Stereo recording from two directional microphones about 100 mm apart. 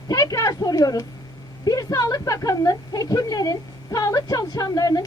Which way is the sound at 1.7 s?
40° left (ahead or behind).